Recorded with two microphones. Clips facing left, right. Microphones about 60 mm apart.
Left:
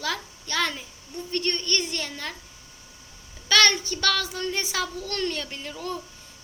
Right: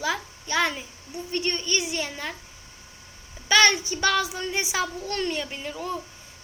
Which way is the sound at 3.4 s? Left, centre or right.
Centre.